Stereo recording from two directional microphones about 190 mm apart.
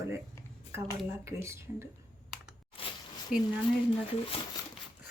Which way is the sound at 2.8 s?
30° left (ahead or behind).